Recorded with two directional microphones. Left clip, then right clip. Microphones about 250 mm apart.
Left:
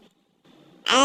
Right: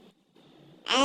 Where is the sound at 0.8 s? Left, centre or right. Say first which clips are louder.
Left 6 dB; centre.